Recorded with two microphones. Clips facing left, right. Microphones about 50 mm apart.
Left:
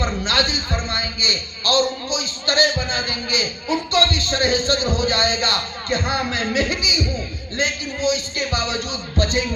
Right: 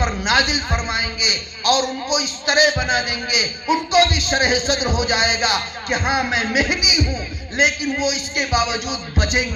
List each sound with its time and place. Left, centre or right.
0.3 s a man's voice: right